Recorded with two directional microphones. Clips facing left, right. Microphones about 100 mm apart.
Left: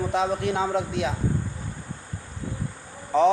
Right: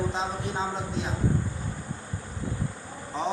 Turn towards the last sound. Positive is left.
turn(degrees=65)  # may be behind; listen again after turning